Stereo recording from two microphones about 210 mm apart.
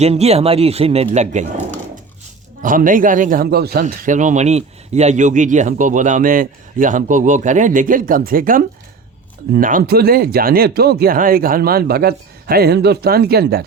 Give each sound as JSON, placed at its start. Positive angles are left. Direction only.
{"t": 0.0, "sound": "speech", "side_deg": -30}
{"t": 2.6, "sound": "speech", "side_deg": -40}
{"t": 3.8, "sound": "speech", "side_deg": -35}